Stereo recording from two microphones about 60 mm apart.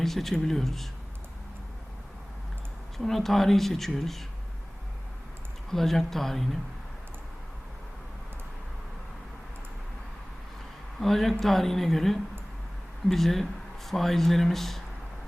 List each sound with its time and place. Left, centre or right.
0.0 s speech: centre
3.0 s speech: centre
5.7 s speech: centre
11.0 s speech: centre